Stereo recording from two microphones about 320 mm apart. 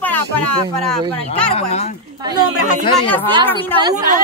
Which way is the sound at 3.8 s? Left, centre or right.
Centre.